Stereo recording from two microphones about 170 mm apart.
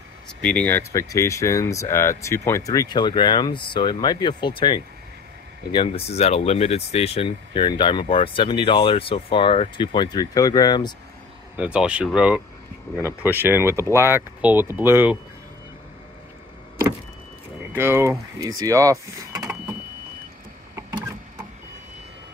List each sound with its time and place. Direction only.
0.4 s speech: 10° left (ahead or behind); by 11.0 s 25° left (ahead or behind)
11.5 s speech: 5° right (ahead or behind)
17.7 s speech: 15° right (ahead or behind)